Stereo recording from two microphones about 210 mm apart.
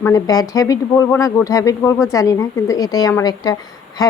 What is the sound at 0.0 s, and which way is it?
Speech, 15° left (ahead or behind).